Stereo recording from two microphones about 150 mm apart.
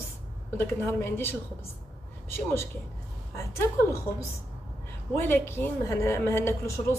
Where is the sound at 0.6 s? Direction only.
15° left (ahead or behind).